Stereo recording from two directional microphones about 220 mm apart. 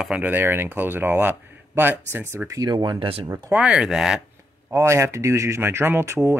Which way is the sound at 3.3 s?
10° right (ahead or behind).